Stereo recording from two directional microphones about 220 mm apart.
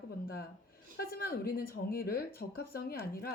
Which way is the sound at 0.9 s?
45° left (ahead or behind).